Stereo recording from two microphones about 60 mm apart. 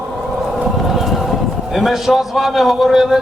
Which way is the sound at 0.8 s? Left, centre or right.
Centre.